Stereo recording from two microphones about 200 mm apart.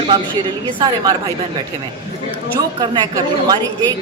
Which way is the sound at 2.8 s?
20° right (ahead or behind).